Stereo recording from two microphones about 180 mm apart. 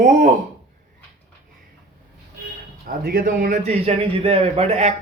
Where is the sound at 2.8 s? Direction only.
50° right (ahead or behind).